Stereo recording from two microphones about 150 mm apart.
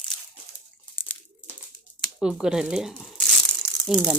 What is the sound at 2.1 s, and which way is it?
Speech, 5° right (ahead or behind).